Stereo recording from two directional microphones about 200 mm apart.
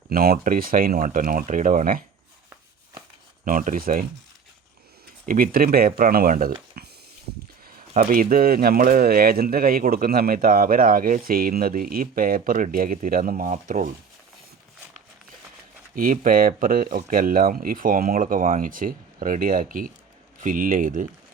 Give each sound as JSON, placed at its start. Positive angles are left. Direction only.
{"t": 0.1, "sound": "speech", "side_deg": -50}
{"t": 3.4, "sound": "speech", "side_deg": -45}
{"t": 5.2, "sound": "speech", "side_deg": -45}
{"t": 16.0, "sound": "speech", "side_deg": -45}